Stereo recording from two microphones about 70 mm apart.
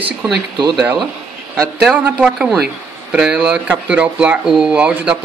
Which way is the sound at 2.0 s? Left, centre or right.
Centre.